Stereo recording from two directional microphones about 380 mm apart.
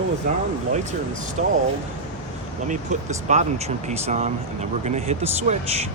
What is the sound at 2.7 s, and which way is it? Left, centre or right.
Speech, centre.